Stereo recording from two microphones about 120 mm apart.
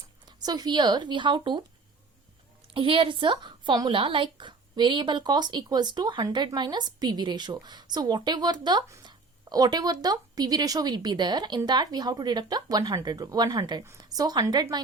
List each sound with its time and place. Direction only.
0.3 s a woman's voice: 35° right (ahead or behind)
2.7 s a woman's voice: 50° right (ahead or behind)